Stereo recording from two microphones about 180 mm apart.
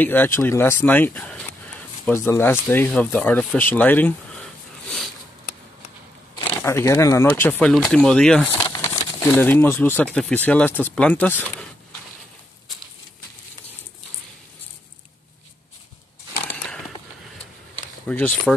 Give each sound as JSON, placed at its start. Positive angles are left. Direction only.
{"t": 0.0, "sound": "speech", "side_deg": 10}
{"t": 6.3, "sound": "speech", "side_deg": 15}
{"t": 8.5, "sound": "crumpling", "side_deg": 25}
{"t": 8.8, "sound": "speech", "side_deg": 15}
{"t": 18.0, "sound": "speech", "side_deg": 10}